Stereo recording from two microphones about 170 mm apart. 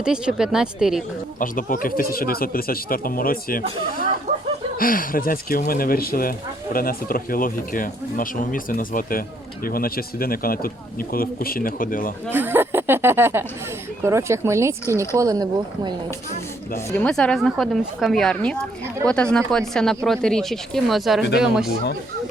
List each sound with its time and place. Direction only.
0.0 s speech: 5° right (ahead or behind)
1.4 s speech: 55° left (ahead or behind)
4.8 s speech: 55° left (ahead or behind)
12.3 s speech: 10° right (ahead or behind)
17.0 s speech: 5° left (ahead or behind)